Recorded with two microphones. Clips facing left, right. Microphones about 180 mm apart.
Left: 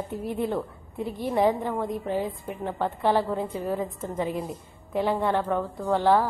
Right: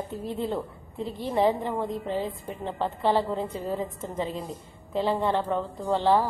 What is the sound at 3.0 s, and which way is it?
A woman's voice, 10° left (ahead or behind).